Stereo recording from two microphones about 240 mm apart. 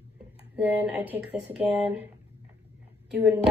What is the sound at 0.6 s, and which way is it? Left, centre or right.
Speech, centre.